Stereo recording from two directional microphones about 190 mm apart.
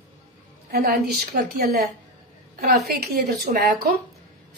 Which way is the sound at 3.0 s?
55° right (ahead or behind).